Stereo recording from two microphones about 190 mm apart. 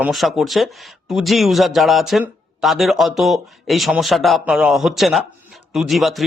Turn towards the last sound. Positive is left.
turn(degrees=0)  # may be behind; listen again after turning